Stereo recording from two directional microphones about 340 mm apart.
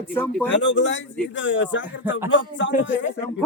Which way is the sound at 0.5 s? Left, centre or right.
Left.